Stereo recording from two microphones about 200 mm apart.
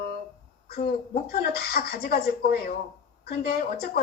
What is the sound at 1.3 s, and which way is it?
Speech, 50° left (ahead or behind).